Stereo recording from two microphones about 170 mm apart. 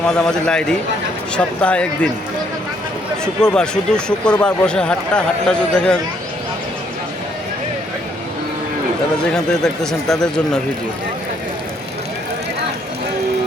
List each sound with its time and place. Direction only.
0.0 s speech: 5° left (ahead or behind)
3.4 s speech: 5° left (ahead or behind)
9.3 s speech: 5° left (ahead or behind)